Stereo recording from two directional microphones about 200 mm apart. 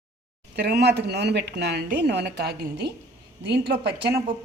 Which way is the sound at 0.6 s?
55° right (ahead or behind).